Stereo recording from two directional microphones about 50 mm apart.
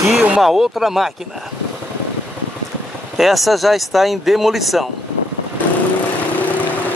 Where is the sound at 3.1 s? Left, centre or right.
Centre.